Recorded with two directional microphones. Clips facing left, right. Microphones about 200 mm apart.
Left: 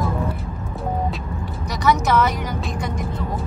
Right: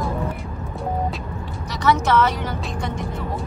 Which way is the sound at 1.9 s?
10° left (ahead or behind).